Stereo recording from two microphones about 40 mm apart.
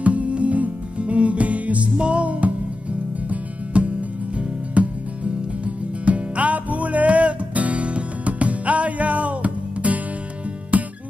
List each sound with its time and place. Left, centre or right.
0.0 s music: right